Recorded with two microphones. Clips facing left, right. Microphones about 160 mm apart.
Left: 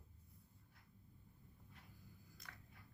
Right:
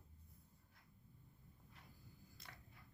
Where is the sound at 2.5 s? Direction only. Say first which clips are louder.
Even; 25° right (ahead or behind).